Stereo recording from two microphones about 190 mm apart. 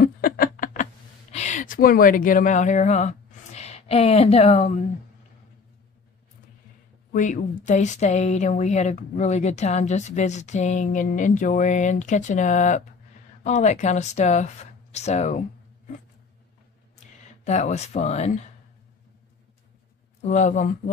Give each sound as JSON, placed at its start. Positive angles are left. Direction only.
{"t": 0.0, "sound": "a sound", "side_deg": 50}
{"t": 1.3, "sound": "speech", "side_deg": 40}
{"t": 7.1, "sound": "speech", "side_deg": 40}
{"t": 17.5, "sound": "speech", "side_deg": 35}
{"t": 20.2, "sound": "speech", "side_deg": 40}